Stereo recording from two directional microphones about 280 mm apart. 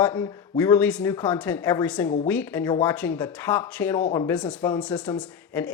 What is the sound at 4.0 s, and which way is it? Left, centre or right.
Speech, centre.